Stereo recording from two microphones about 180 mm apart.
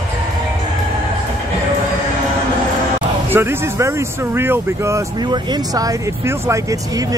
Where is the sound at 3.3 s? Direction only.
15° right (ahead or behind).